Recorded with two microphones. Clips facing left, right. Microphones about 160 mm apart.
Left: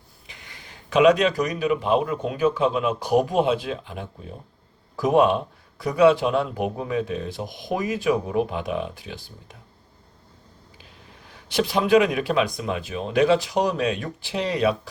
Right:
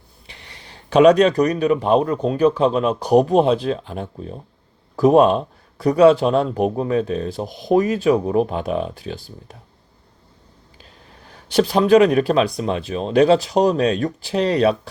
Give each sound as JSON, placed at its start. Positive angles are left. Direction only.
{"t": 0.3, "sound": "speech", "side_deg": -35}
{"t": 11.5, "sound": "speech", "side_deg": -35}